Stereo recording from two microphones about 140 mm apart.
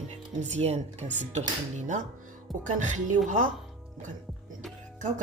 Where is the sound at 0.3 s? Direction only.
55° right (ahead or behind).